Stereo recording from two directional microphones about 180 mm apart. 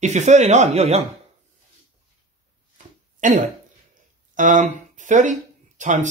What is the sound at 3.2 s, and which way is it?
Speech, 45° right (ahead or behind).